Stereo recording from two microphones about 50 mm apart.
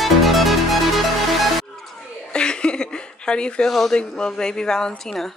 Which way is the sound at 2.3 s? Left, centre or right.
Centre.